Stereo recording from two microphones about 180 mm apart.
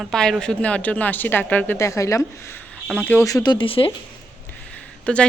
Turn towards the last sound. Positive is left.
turn(degrees=5)  # may be behind; listen again after turning